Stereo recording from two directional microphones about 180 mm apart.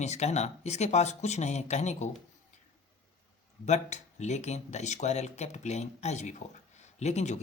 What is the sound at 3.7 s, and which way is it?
Speech, 40° left (ahead or behind).